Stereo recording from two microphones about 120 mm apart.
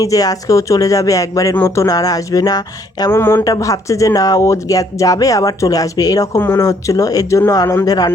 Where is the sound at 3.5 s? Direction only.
30° left (ahead or behind).